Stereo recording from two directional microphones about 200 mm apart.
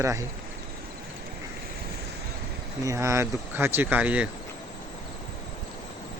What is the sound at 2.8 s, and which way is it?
Speech, 15° right (ahead or behind).